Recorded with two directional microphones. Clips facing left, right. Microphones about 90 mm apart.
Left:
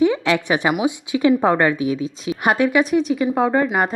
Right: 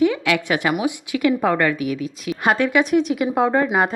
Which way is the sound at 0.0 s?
25° left (ahead or behind).